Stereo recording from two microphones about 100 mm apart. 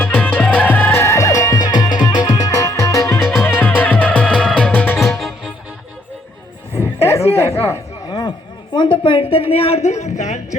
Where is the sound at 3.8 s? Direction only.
15° left (ahead or behind).